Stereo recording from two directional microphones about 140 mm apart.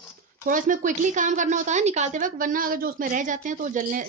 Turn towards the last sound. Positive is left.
turn(degrees=-65)  # may be behind; listen again after turning